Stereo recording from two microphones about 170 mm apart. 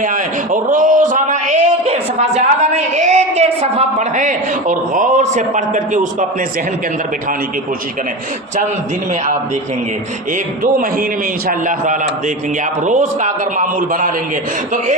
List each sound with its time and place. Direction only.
0.0 s a man's voice: 50° right (ahead or behind)
11.4 s a man's voice: 50° right (ahead or behind)